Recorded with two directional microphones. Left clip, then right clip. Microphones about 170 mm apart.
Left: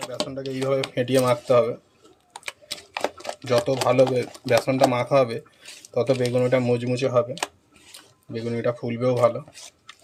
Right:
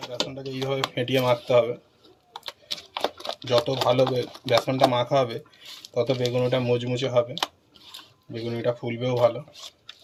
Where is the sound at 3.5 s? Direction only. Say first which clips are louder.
Left 1 dB; 35° left (ahead or behind).